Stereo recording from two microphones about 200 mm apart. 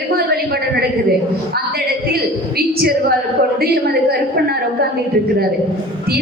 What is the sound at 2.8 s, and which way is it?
Speech, 50° right (ahead or behind).